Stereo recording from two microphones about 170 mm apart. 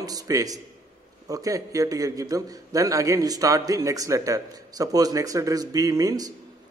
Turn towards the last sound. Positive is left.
turn(degrees=-20)  # may be behind; listen again after turning